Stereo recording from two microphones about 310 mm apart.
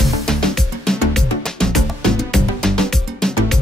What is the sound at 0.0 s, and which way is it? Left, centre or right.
Music, centre.